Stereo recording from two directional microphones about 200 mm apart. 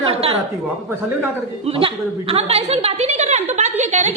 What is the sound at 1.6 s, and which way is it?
A woman's voice, 25° right (ahead or behind).